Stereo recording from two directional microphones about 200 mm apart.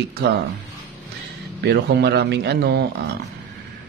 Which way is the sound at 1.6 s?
55° right (ahead or behind).